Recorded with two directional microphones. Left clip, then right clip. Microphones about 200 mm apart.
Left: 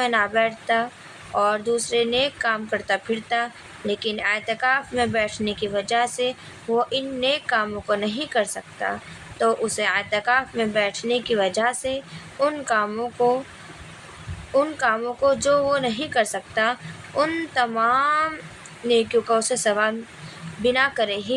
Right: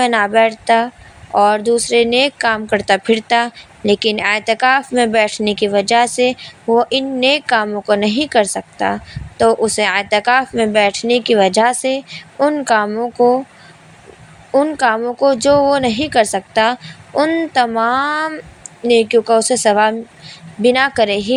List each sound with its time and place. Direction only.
0.0 s a woman's voice: 30° right (ahead or behind)
14.6 s a woman's voice: 25° right (ahead or behind)